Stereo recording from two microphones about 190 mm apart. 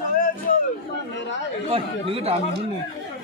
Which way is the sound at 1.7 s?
30° right (ahead or behind).